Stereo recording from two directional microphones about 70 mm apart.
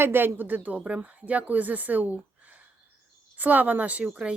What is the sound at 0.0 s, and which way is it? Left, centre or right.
A woman's voice, right.